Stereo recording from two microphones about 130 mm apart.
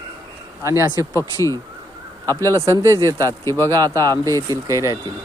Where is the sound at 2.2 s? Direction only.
25° right (ahead or behind).